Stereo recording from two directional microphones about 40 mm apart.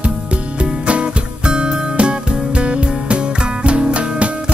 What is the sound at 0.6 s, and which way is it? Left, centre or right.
Music, right.